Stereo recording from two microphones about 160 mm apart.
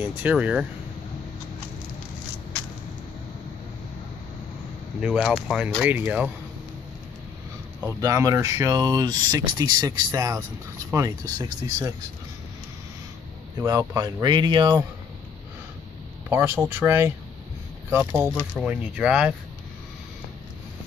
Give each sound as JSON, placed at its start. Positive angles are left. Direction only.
{"t": 0.0, "sound": "speech", "side_deg": -10}
{"t": 5.0, "sound": "speech", "side_deg": -5}
{"t": 7.8, "sound": "speech", "side_deg": -20}
{"t": 13.6, "sound": "speech", "side_deg": -20}
{"t": 16.3, "sound": "speech", "side_deg": -15}